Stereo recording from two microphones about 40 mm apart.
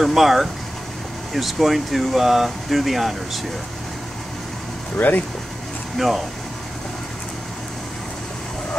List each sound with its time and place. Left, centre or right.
0.0 s speech: centre
4.9 s speech: left
5.9 s speech: centre